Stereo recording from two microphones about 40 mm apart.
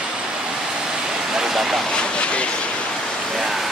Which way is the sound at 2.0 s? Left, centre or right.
Left.